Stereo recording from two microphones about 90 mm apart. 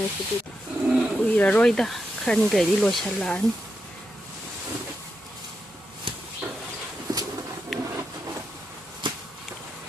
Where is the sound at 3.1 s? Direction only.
15° left (ahead or behind).